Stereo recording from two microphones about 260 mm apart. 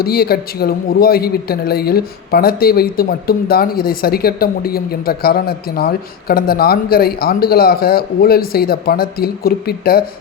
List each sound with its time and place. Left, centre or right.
0.0 s a man's voice: left